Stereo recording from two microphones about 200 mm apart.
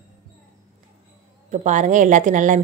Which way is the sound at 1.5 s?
35° right (ahead or behind).